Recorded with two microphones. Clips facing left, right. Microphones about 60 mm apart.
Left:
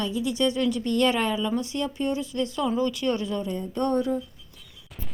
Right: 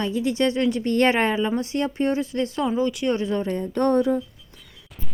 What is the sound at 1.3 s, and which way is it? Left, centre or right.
Speech, right.